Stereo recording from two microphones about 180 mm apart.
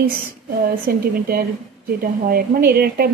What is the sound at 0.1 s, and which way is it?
A woman's voice, 55° right (ahead or behind).